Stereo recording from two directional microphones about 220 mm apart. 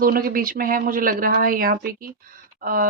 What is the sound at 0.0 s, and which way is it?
A woman's voice, 40° right (ahead or behind).